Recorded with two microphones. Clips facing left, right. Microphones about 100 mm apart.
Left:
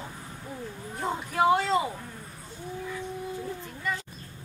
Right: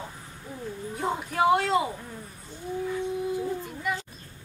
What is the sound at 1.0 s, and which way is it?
Speech, centre (ahead or behind).